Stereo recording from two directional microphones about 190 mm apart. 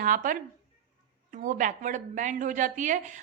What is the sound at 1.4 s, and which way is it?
A woman's voice, 40° right (ahead or behind).